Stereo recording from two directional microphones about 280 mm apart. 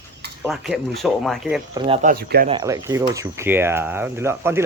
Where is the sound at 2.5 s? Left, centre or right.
Centre.